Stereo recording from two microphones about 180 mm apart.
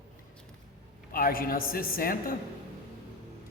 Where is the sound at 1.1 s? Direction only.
55° left (ahead or behind).